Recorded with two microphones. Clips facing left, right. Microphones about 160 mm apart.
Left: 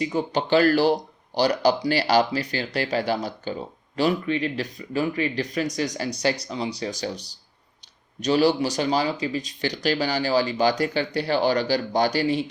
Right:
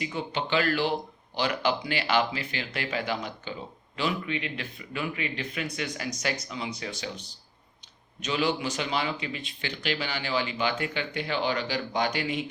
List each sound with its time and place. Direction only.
0.0 s speech: 40° left (ahead or behind)